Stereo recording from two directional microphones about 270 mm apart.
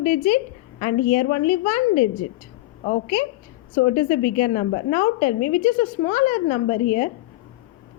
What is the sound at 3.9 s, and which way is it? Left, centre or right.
Speech, left.